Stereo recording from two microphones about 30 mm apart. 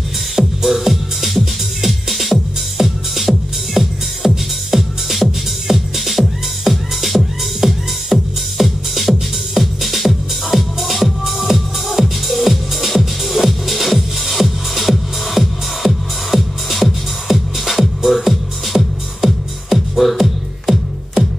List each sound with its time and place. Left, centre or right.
0.7 s music: centre
2.8 s music: centre
3.2 s music: centre